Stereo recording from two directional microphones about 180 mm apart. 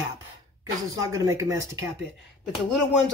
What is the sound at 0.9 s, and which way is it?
Speech, 20° right (ahead or behind).